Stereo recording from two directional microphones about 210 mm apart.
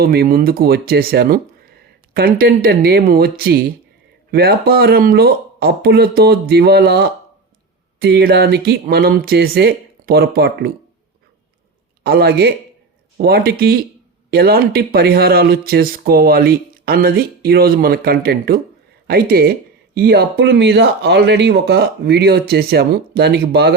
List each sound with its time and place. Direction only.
0.0 s speech: 45° right (ahead or behind)
12.0 s speech: 50° right (ahead or behind)